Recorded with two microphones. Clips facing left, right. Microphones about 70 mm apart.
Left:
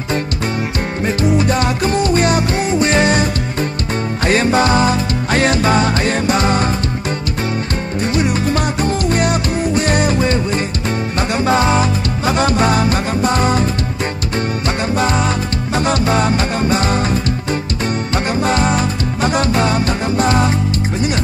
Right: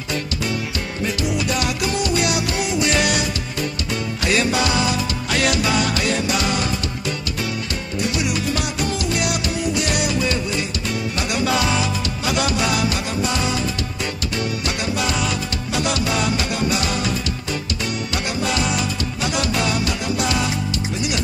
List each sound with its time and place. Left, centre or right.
1.0 s music: left
4.3 s music: left
8.0 s music: left
15.0 s music: left